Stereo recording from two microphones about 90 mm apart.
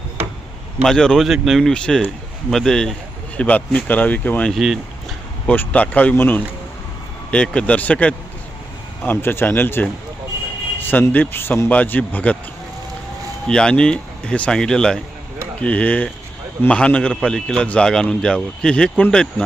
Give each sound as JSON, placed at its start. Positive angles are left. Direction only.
{"t": 0.9, "sound": "a man's voice", "side_deg": 5}
{"t": 4.5, "sound": "speech", "side_deg": -5}
{"t": 5.5, "sound": "a man's voice", "side_deg": 15}
{"t": 13.5, "sound": "a man's voice", "side_deg": 10}